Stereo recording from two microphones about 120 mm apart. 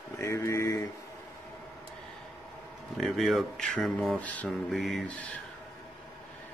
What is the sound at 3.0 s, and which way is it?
Speech, centre (ahead or behind).